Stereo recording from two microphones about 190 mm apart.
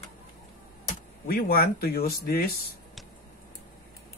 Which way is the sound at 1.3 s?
50° left (ahead or behind).